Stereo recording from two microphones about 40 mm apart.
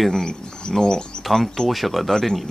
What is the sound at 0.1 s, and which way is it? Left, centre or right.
Speech, centre.